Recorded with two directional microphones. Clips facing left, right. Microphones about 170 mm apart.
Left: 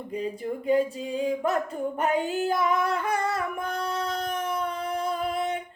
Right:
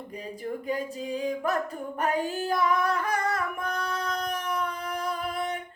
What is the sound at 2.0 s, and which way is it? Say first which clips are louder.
Singing: left 1 dB; 25° left (ahead or behind).